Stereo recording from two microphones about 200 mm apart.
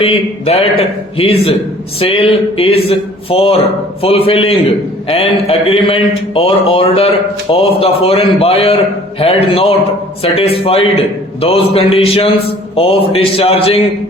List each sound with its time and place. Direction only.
0.0 s a man's voice: 30° left (ahead or behind)